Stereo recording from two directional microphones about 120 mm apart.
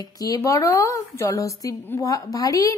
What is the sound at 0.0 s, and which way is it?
A woman's voice, 30° left (ahead or behind).